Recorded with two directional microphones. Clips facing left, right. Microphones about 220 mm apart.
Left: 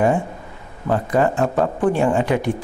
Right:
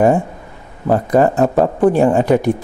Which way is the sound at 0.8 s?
40° right (ahead or behind).